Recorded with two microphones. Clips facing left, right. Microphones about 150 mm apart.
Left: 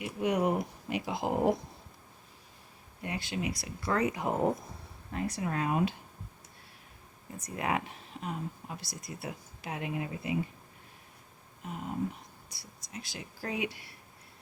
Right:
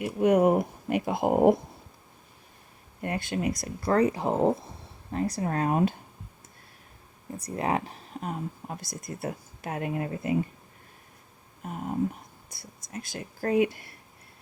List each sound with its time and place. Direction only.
0.0 s speech: 50° right (ahead or behind)
3.0 s speech: 50° right (ahead or behind); by 4.7 s 25° right (ahead or behind)
5.1 s speech: 35° right (ahead or behind)
7.3 s speech: 35° right (ahead or behind)
11.6 s speech: 50° right (ahead or behind)